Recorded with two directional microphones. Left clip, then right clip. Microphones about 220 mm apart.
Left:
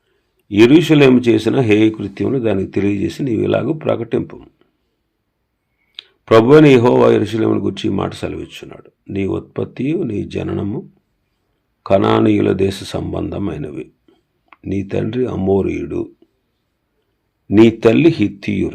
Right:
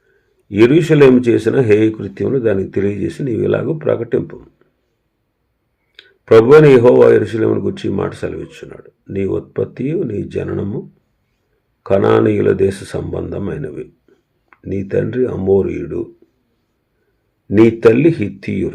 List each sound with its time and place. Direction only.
0.4 s a man's voice: centre (ahead or behind)
0.8 s speech: 30° left (ahead or behind)
6.0 s speech: 35° left (ahead or behind)
14.8 s speech: 30° left (ahead or behind)
17.5 s speech: 35° left (ahead or behind)